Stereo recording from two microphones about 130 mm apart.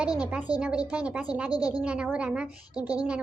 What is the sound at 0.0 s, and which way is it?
A woman's voice, 10° right (ahead or behind).